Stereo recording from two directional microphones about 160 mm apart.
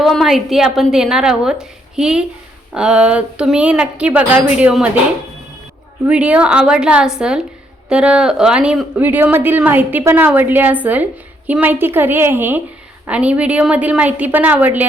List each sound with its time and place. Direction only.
0.0 s a woman's voice: centre (ahead or behind)
6.1 s a woman's voice: 10° right (ahead or behind)